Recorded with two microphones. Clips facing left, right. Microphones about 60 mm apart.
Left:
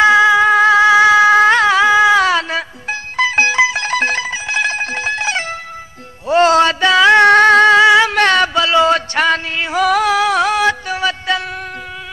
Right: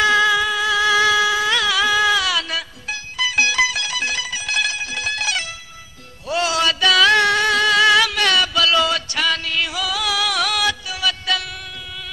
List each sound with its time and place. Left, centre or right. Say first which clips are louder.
0.0 s music: left 7 dB; left
0.5 s a sound: left 9 dB; left
3.8 s music: left 8 dB; left
8.1 s music: left 6 dB; left